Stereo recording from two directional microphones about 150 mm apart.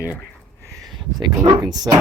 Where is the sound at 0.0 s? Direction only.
20° left (ahead or behind).